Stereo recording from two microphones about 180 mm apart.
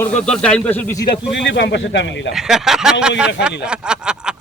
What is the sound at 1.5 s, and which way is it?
Speech, 75° left (ahead or behind).